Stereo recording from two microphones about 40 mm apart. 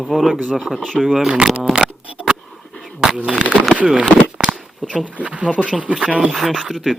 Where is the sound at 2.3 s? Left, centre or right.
Centre.